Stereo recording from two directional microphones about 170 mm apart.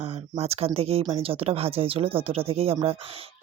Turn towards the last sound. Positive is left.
turn(degrees=-35)  # may be behind; listen again after turning